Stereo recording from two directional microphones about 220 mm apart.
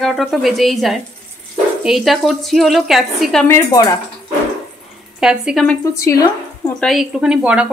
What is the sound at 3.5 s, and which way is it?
Speech, 10° left (ahead or behind).